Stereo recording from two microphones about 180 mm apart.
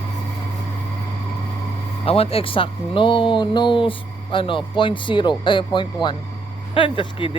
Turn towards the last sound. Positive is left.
turn(degrees=30)  # may be behind; listen again after turning